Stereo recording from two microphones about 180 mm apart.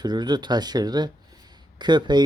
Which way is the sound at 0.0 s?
25° right (ahead or behind).